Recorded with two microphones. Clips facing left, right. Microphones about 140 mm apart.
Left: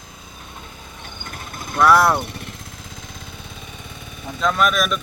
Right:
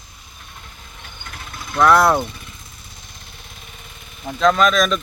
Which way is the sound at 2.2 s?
75° left (ahead or behind).